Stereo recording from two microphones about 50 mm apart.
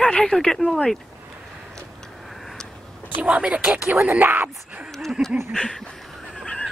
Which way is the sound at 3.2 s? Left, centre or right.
Right.